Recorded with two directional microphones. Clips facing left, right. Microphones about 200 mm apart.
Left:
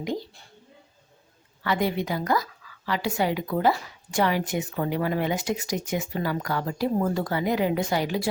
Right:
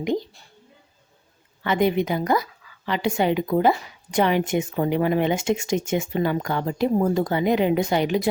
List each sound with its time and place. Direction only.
0.0 s speech: 20° right (ahead or behind)
1.6 s a woman's voice: 20° right (ahead or behind)